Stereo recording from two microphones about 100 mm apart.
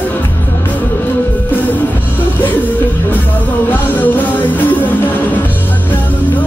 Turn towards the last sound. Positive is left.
turn(degrees=15)  # may be behind; listen again after turning